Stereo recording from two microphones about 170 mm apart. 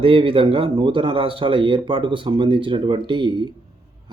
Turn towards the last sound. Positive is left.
turn(degrees=-25)  # may be behind; listen again after turning